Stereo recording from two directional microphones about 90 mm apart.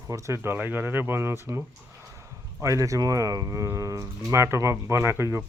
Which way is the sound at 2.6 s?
35° right (ahead or behind).